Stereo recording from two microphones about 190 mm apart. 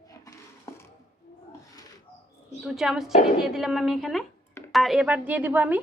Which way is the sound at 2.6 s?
Centre (ahead or behind).